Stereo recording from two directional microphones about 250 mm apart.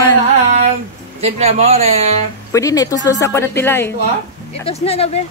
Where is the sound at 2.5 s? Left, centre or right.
Centre.